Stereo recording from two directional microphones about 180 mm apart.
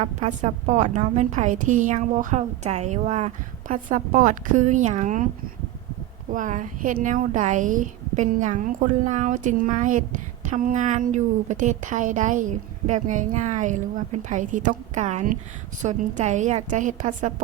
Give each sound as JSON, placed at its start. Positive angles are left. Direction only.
{"t": 0.0, "sound": "a woman's voice", "side_deg": -40}
{"t": 6.3, "sound": "a woman's voice", "side_deg": -45}